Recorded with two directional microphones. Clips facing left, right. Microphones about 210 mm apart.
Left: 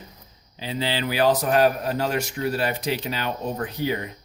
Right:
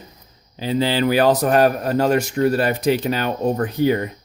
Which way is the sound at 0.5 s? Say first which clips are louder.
Right 7 dB; 45° right (ahead or behind).